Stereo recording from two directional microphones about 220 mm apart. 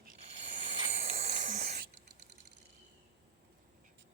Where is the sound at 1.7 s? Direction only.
45° right (ahead or behind).